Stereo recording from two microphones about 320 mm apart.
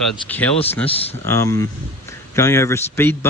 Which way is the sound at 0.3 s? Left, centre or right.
Centre.